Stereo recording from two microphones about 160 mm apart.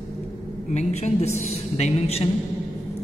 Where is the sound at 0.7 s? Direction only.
45° left (ahead or behind).